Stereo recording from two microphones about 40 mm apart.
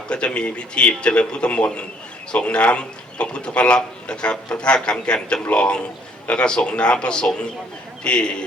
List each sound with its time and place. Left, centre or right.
0.1 s speech: left